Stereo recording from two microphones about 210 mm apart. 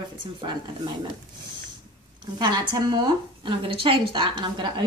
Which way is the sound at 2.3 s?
20° right (ahead or behind).